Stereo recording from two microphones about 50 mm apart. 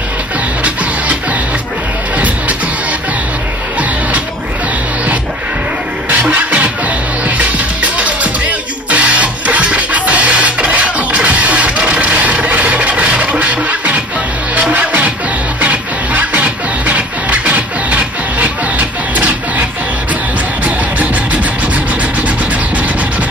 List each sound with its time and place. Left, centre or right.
2.1 s music: right
6.0 s music: right
20.6 s music: right